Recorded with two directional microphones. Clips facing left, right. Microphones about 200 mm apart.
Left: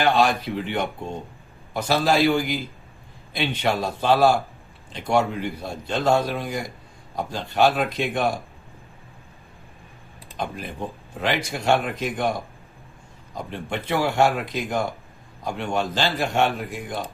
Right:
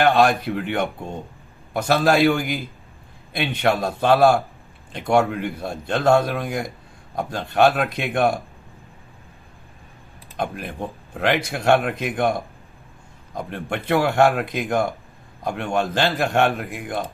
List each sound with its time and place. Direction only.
0.0 s a man's voice: 55° right (ahead or behind)
10.3 s a man's voice: 55° right (ahead or behind)
13.3 s a man's voice: 55° right (ahead or behind)